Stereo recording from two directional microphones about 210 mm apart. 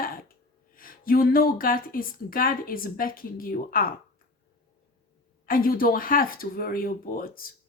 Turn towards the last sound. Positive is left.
turn(degrees=45)  # may be behind; listen again after turning